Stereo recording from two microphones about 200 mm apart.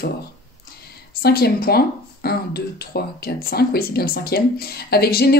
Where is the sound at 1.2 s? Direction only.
50° left (ahead or behind).